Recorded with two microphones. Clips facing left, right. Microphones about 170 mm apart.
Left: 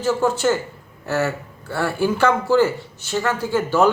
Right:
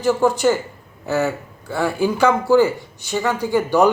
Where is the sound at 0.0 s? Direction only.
15° right (ahead or behind).